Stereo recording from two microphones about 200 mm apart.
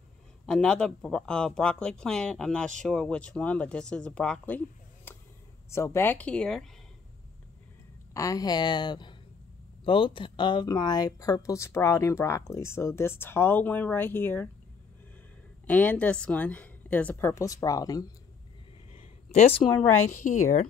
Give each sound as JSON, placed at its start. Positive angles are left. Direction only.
{"t": 0.5, "sound": "a woman's voice", "side_deg": 5}
{"t": 8.1, "sound": "a woman's voice", "side_deg": 15}
{"t": 15.6, "sound": "a woman's voice", "side_deg": 10}
{"t": 18.9, "sound": "a sound", "side_deg": 35}
{"t": 20.1, "sound": "speech", "side_deg": 40}